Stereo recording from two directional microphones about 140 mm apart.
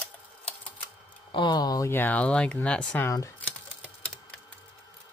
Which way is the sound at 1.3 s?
30° left (ahead or behind).